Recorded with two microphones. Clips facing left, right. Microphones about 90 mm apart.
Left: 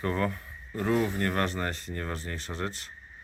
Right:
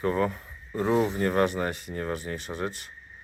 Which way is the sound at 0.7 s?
20° right (ahead or behind).